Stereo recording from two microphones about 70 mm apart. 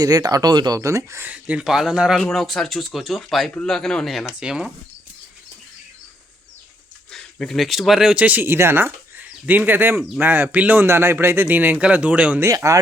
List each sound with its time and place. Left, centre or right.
0.0 s speech: right
0.8 s speech: right
1.2 s speech: centre
1.6 s speech: centre
2.1 s speech: centre
4.4 s speech: centre
7.1 s speech: centre
8.2 s speech: right
8.4 s speech: right; by 12.4 s centre
12.5 s speech: right